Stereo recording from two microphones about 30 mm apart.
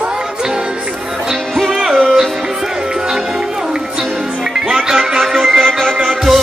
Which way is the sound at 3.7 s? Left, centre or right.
Right.